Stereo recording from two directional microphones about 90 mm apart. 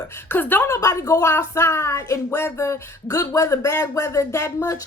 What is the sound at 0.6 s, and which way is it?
A woman's voice, 35° left (ahead or behind).